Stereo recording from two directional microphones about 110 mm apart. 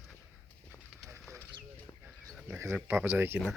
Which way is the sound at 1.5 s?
50° right (ahead or behind).